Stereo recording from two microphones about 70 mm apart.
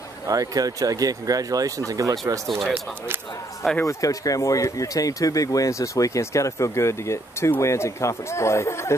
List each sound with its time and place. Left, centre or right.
0.3 s speech: right
3.8 s speech: left